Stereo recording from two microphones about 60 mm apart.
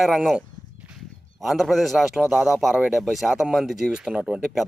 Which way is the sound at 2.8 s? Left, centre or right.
Centre.